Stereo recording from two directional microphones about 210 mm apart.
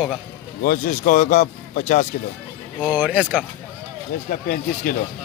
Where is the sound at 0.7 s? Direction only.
40° left (ahead or behind).